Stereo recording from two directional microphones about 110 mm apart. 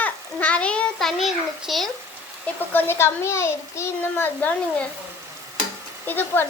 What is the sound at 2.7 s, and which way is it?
A child's voice, 20° left (ahead or behind).